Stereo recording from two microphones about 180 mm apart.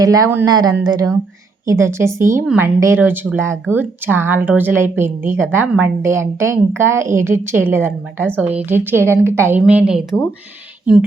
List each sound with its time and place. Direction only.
0.0 s speech: 20° right (ahead or behind)